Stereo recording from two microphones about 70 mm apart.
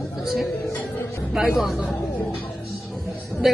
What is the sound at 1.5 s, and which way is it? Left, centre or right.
Speech, centre.